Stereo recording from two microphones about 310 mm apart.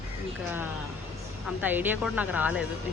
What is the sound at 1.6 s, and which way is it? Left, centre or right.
Speech, centre.